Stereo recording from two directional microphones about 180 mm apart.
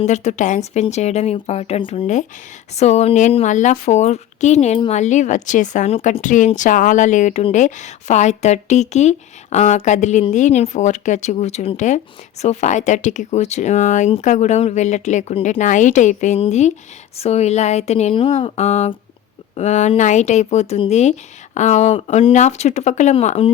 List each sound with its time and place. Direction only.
0.0 s a woman's voice: 40° left (ahead or behind)